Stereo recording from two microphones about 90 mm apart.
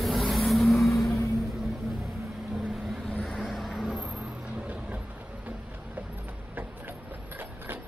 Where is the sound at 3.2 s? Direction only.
Centre (ahead or behind).